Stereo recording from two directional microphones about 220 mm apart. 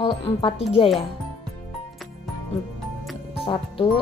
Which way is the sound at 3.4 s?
25° left (ahead or behind).